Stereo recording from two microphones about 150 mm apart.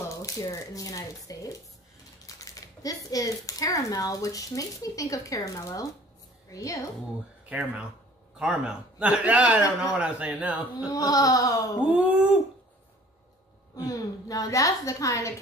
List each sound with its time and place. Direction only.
0.1 s speech: 20° left (ahead or behind)
7.4 s a man's voice: 10° right (ahead or behind)
10.9 s speech: 25° left (ahead or behind)
11.9 s a man's voice: 10° right (ahead or behind)
13.7 s speech: 25° left (ahead or behind)